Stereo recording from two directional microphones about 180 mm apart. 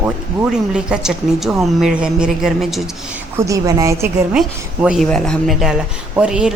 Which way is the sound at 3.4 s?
20° right (ahead or behind).